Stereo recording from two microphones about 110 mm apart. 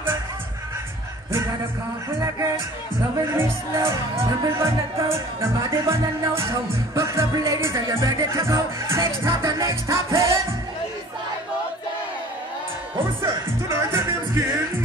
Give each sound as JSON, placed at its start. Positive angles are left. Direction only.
{"t": 2.0, "sound": "music", "side_deg": -30}
{"t": 13.2, "sound": "music", "side_deg": -25}